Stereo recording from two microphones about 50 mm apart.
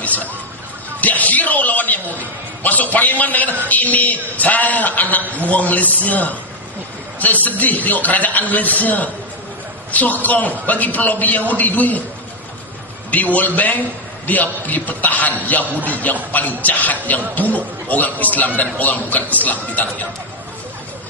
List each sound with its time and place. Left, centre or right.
0.0 s a sound: left
3.6 s a man's voice: left
13.1 s a man's voice: left